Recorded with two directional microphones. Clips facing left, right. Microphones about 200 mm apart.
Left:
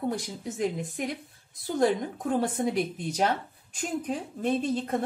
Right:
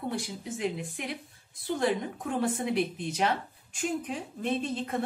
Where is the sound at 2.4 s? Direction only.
40° left (ahead or behind).